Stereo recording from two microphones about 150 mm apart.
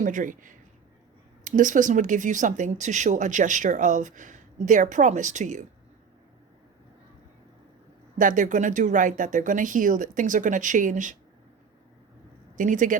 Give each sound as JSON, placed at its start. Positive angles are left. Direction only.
{"t": 0.0, "sound": "speech", "side_deg": -60}
{"t": 8.2, "sound": "speech", "side_deg": -60}
{"t": 12.5, "sound": "speech", "side_deg": -60}